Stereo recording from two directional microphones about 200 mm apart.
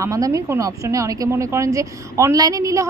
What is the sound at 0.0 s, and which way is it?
Speech, 15° right (ahead or behind).